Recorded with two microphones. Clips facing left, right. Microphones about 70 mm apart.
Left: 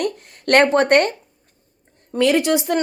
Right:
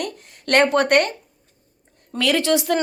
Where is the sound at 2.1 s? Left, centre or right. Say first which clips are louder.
Left 3 dB; centre.